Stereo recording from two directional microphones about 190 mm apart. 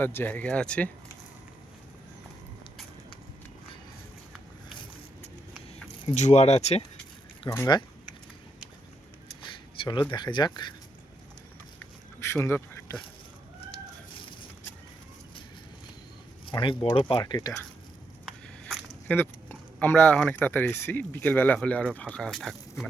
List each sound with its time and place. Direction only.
0.0 s speech: 10° left (ahead or behind)
6.1 s speech: 35° left (ahead or behind)
7.5 s speech: 20° left (ahead or behind)
9.7 s speech: 25° left (ahead or behind)
11.8 s a sound: 10° left (ahead or behind)
14.1 s fowl: 25° left (ahead or behind)
16.5 s speech: 25° left (ahead or behind)
18.3 s speech: 5° left (ahead or behind)